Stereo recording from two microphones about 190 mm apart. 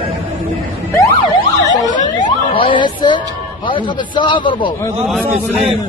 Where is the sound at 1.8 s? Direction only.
25° left (ahead or behind).